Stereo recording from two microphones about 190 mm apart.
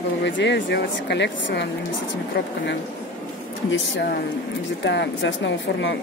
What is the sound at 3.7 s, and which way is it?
Speech, 75° left (ahead or behind).